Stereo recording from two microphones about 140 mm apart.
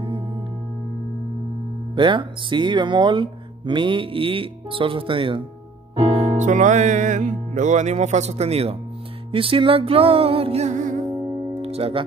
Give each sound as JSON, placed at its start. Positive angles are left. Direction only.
{"t": 2.0, "sound": "speech", "side_deg": -35}
{"t": 5.9, "sound": "music", "side_deg": -40}
{"t": 6.3, "sound": "speech", "side_deg": -60}
{"t": 11.6, "sound": "music", "side_deg": -45}